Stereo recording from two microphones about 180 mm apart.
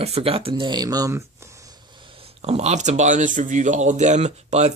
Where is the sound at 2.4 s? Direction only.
35° right (ahead or behind).